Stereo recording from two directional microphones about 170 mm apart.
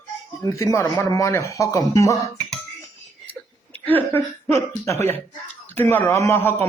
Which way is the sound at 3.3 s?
10° left (ahead or behind).